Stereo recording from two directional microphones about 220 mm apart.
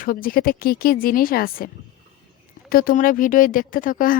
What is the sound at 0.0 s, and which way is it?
Speech, 40° left (ahead or behind).